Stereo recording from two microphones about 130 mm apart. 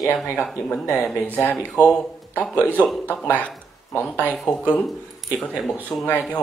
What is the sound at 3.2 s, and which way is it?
Speech, 10° left (ahead or behind).